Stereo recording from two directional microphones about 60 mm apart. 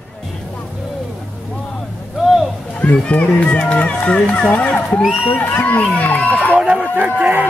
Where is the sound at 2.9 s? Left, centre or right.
Centre.